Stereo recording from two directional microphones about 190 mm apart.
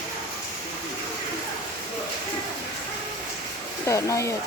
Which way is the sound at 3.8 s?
15° left (ahead or behind).